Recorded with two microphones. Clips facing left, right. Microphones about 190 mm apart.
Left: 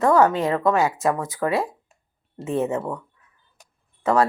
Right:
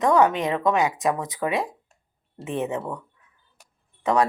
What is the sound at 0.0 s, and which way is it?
Speech, 15° right (ahead or behind).